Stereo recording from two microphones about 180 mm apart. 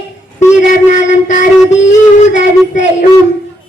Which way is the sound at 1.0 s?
45° left (ahead or behind).